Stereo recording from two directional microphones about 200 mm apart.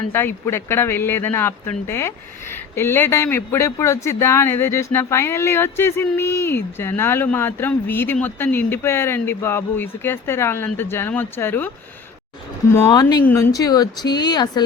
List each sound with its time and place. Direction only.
0.1 s speech: 10° left (ahead or behind)
12.7 s speech: 20° left (ahead or behind)